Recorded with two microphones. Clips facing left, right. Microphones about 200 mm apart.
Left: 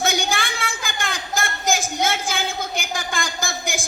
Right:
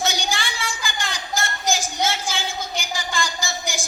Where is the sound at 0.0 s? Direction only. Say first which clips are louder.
Left 3 dB; 55° left (ahead or behind).